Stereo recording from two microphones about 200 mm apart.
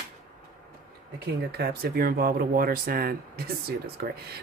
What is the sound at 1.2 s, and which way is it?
Speech, 50° right (ahead or behind).